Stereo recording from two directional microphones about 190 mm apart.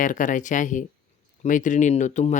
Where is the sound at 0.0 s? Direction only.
45° left (ahead or behind).